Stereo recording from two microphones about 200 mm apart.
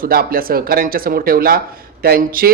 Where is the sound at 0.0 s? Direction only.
45° right (ahead or behind).